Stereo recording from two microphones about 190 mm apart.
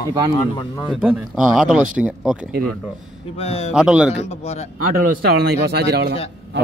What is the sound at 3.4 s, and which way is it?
Speech, 30° left (ahead or behind).